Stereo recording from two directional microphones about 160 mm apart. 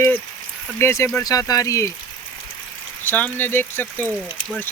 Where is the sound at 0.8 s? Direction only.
15° left (ahead or behind).